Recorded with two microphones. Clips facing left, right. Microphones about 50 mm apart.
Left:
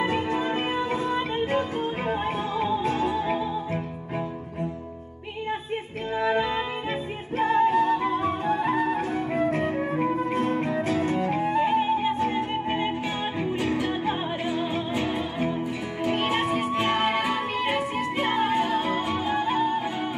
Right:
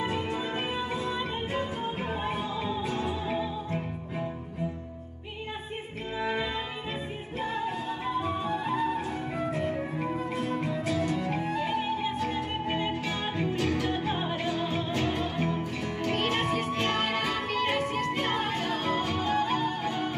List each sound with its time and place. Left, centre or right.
0.0 s music: left
2.0 s music: left
7.3 s music: left
9.9 s music: left